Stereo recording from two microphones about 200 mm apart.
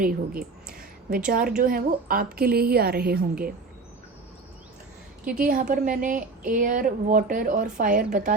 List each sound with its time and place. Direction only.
0.0 s a woman's voice: 45° right (ahead or behind)
5.2 s a woman's voice: 5° right (ahead or behind)
5.5 s a woman's voice: 40° right (ahead or behind)